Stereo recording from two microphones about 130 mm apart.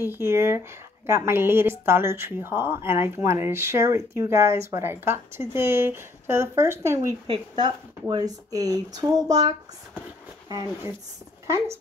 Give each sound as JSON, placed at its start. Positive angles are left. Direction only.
{"t": 0.0, "sound": "a woman's voice", "side_deg": -20}
{"t": 7.2, "sound": "a woman's voice", "side_deg": -35}